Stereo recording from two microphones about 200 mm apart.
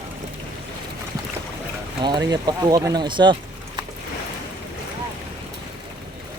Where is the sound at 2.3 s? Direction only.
20° right (ahead or behind).